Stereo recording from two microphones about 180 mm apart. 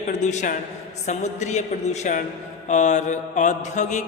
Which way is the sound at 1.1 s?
40° left (ahead or behind).